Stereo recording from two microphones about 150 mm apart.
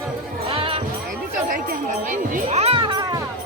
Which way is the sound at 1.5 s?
60° right (ahead or behind).